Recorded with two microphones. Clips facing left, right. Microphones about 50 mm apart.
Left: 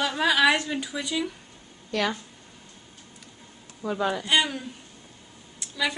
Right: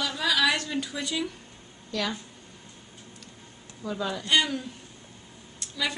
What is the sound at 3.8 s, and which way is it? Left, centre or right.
Speech, left.